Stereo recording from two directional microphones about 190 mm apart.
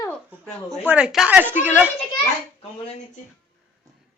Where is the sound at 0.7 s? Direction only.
5° right (ahead or behind).